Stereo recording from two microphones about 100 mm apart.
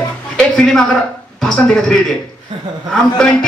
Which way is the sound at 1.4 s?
10° left (ahead or behind).